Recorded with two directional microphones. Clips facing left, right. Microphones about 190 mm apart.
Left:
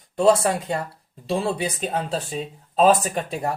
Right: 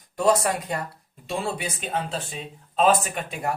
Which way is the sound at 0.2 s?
30° left (ahead or behind).